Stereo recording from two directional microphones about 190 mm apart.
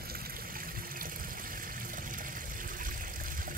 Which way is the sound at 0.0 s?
50° right (ahead or behind).